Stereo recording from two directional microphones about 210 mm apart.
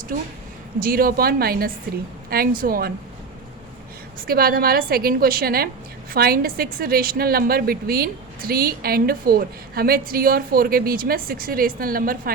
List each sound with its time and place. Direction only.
0.1 s a woman's voice: 40° right (ahead or behind)
4.3 s a woman's voice: 45° right (ahead or behind)